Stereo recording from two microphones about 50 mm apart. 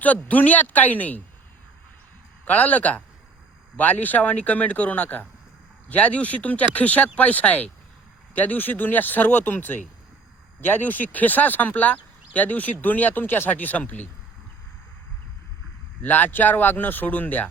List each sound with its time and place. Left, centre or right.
0.0 s speech: left
2.4 s a man's voice: left
16.0 s speech: left